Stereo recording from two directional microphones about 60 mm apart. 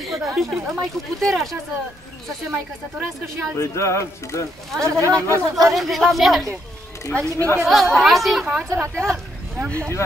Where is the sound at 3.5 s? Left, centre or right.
Left.